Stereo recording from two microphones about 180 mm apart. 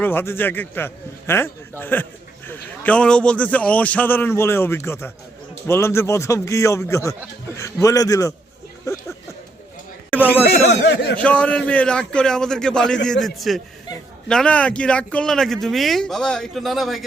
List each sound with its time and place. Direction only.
0.0 s a man's voice: 10° left (ahead or behind)
8.9 s music: 15° left (ahead or behind)
10.1 s a sound: 10° left (ahead or behind)
10.7 s a man's voice: 75° left (ahead or behind)
11.2 s a man's voice: 5° left (ahead or behind)